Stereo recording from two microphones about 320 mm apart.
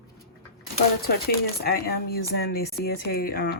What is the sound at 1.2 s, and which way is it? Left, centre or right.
Speech, left.